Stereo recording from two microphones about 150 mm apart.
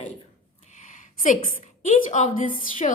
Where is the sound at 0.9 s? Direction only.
60° left (ahead or behind).